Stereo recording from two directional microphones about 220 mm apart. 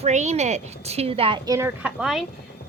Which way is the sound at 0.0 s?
30° right (ahead or behind).